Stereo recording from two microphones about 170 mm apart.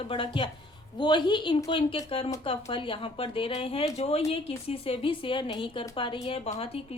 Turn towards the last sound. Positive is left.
turn(degrees=35)  # may be behind; listen again after turning